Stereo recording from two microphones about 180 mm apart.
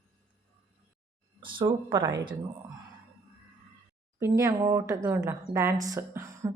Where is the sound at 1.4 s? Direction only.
25° right (ahead or behind).